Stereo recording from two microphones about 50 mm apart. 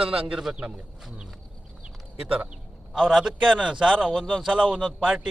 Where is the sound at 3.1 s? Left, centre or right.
Centre.